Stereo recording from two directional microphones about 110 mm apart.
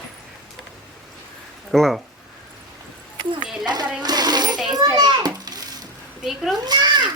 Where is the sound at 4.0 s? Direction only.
40° right (ahead or behind).